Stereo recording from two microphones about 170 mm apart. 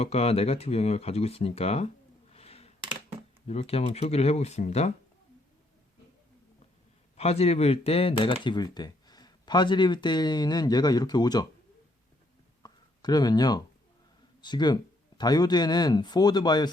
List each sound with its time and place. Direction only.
0.0 s speech: 35° left (ahead or behind)
2.3 s a sound: 35° left (ahead or behind)
3.4 s speech: 35° left (ahead or behind)
7.2 s speech: 35° left (ahead or behind)
12.6 s a sound: 25° left (ahead or behind)
14.4 s speech: 25° left (ahead or behind)